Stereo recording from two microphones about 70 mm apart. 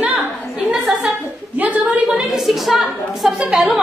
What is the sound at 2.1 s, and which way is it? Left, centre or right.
A woman's voice, centre.